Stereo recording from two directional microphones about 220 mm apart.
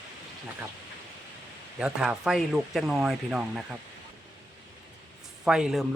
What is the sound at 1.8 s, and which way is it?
Speech, 5° right (ahead or behind).